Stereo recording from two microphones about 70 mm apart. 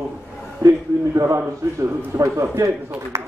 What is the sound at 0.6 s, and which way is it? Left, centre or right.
A man's voice, right.